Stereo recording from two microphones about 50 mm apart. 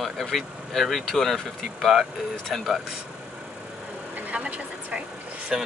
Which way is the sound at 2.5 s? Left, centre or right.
Centre.